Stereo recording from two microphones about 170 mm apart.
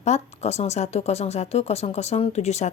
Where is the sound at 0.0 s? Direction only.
40° left (ahead or behind).